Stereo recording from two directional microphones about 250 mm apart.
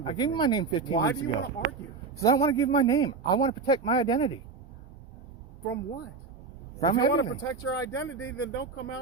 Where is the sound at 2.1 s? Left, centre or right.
Centre.